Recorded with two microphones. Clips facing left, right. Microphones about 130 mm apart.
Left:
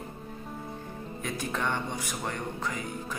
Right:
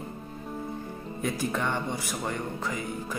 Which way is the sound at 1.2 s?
5° right (ahead or behind).